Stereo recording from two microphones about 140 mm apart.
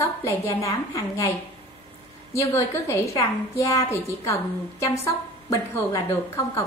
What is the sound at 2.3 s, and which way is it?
A woman's voice, 20° left (ahead or behind).